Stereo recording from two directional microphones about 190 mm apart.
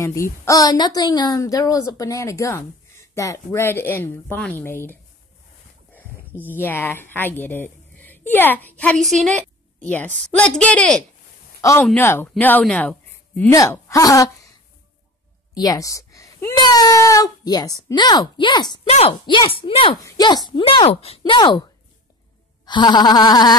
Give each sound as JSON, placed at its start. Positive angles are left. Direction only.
{"t": 0.0, "sound": "a woman's voice", "side_deg": 15}
{"t": 5.9, "sound": "a woman's voice", "side_deg": 10}
{"t": 15.5, "sound": "speech", "side_deg": 20}
{"t": 22.7, "sound": "speech", "side_deg": 25}